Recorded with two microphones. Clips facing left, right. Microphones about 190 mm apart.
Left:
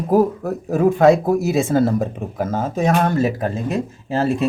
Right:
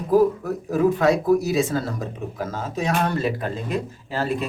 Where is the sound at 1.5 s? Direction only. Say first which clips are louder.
Left 6 dB; 55° left (ahead or behind).